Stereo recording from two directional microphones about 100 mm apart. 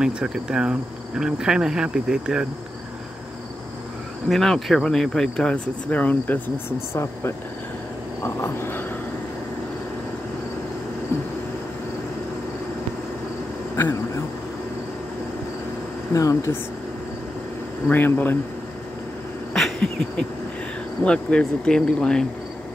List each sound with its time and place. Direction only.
0.0 s speech: 5° right (ahead or behind)
4.3 s speech: centre (ahead or behind); by 7.0 s 20° left (ahead or behind)
8.2 s frog: 25° left (ahead or behind)
13.7 s a sound: 25° left (ahead or behind)
16.1 s speech: 35° left (ahead or behind)
17.8 s frog: 20° left (ahead or behind)
19.5 s a sound: 5° left (ahead or behind)
21.0 s speech: 10° left (ahead or behind)